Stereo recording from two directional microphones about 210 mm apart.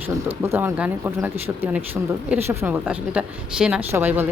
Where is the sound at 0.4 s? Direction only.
10° right (ahead or behind).